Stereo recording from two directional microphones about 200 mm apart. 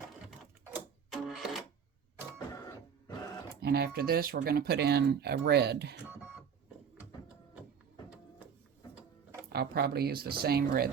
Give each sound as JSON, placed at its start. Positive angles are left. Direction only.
{"t": 0.3, "sound": "sewing machine", "side_deg": 0}
{"t": 3.6, "sound": "speech", "side_deg": -50}
{"t": 9.5, "sound": "speech", "side_deg": -50}